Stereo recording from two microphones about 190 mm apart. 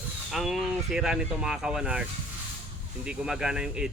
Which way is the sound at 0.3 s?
Centre (ahead or behind).